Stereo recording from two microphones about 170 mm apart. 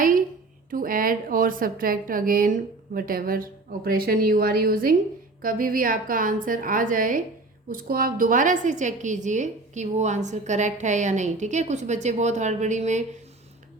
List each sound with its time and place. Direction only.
0.7 s a woman's voice: 55° right (ahead or behind)